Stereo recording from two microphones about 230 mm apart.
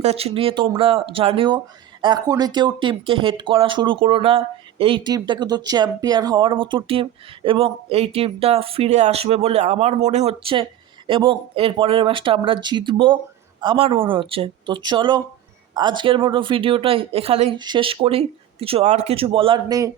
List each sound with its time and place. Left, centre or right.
0.0 s speech: right